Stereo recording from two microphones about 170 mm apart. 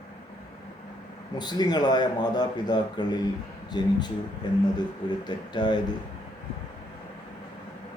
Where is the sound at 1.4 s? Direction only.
25° left (ahead or behind).